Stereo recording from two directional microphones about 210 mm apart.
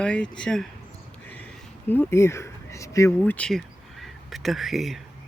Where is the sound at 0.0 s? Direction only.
5° left (ahead or behind).